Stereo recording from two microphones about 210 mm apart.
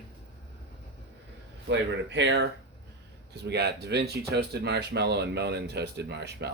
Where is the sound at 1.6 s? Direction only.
60° right (ahead or behind).